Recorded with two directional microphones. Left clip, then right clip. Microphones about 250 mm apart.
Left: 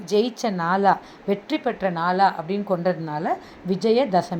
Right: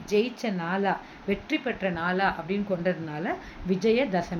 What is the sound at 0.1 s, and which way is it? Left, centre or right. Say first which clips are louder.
A woman's voice: left 4 dB; centre.